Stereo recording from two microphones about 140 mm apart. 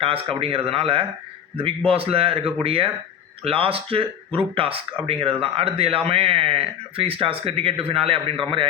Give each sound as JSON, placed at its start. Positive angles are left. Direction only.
{"t": 0.0, "sound": "a man's voice", "side_deg": -40}